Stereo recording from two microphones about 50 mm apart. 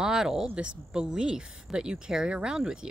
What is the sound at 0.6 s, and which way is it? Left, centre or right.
Speech, right.